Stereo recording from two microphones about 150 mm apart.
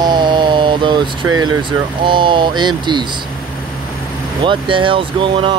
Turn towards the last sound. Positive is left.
turn(degrees=-35)  # may be behind; listen again after turning